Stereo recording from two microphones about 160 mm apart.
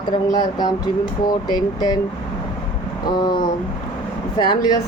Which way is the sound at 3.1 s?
25° left (ahead or behind).